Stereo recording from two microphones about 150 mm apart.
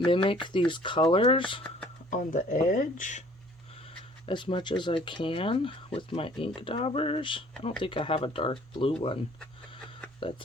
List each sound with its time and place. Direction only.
0.0 s speech: 35° left (ahead or behind)
2.0 s speech: 55° left (ahead or behind)
4.3 s speech: 35° left (ahead or behind)